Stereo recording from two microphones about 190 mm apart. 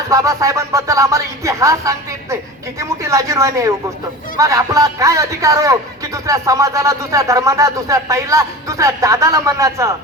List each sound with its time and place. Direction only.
0.1 s speech: 15° right (ahead or behind)